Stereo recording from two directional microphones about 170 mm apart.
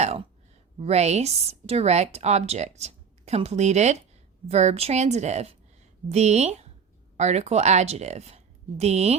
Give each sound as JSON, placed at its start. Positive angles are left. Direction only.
{"t": 0.8, "sound": "speech", "side_deg": -40}